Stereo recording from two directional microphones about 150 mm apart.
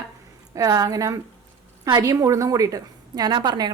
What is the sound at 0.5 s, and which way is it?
A woman's voice, 25° right (ahead or behind).